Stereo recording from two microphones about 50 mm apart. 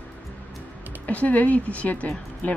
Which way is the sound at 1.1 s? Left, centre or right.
Left.